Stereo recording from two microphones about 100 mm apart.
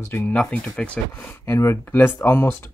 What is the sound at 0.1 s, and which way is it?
Speech, 20° left (ahead or behind).